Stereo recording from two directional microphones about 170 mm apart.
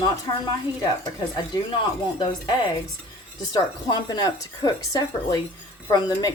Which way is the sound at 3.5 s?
25° left (ahead or behind).